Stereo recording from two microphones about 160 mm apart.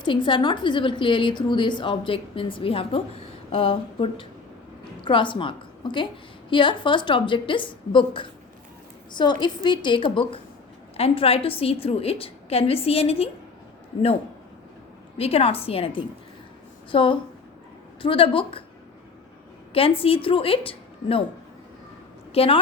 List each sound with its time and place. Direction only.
0.0 s a woman's voice: 30° left (ahead or behind)
15.2 s a woman's voice: 35° left (ahead or behind)
19.7 s a woman's voice: 35° left (ahead or behind)
22.3 s a woman's voice: 35° left (ahead or behind)